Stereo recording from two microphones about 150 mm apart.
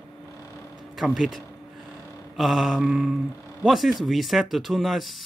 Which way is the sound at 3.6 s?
Centre (ahead or behind).